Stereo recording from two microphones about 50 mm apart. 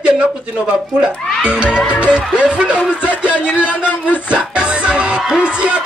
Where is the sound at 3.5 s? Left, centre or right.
Left.